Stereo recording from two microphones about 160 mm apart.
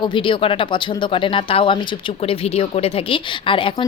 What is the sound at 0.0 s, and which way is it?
Speech, 30° left (ahead or behind).